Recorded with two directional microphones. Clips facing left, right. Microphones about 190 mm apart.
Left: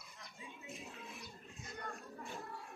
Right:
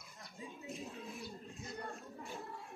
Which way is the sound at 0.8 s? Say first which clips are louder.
Right 5 dB; 35° right (ahead or behind).